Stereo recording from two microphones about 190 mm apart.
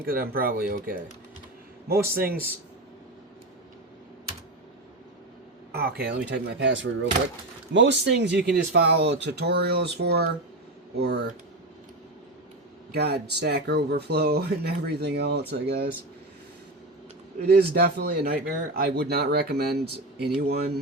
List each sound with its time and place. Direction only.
0.0 s speech: 50° right (ahead or behind)
5.7 s speech: 55° right (ahead or behind)
12.9 s speech: 60° right (ahead or behind)
17.4 s speech: 60° right (ahead or behind)